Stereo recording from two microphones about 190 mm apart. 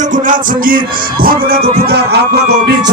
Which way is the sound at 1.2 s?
50° right (ahead or behind).